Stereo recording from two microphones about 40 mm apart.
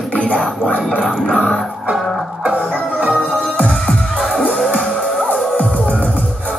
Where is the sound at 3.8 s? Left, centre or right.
Centre.